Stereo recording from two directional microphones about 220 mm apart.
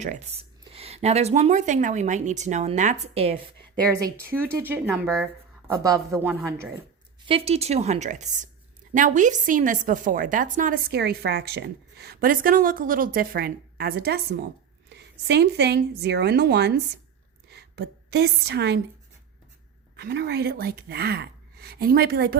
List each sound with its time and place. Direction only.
0.0 s a woman's voice: 30° right (ahead or behind)
3.9 s speech: 10° right (ahead or behind)
7.3 s a woman's voice: 25° right (ahead or behind); by 18.8 s 50° right (ahead or behind)
20.0 s speech: 50° right (ahead or behind)